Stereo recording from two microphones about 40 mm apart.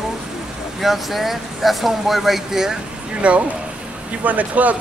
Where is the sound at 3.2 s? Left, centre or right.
Right.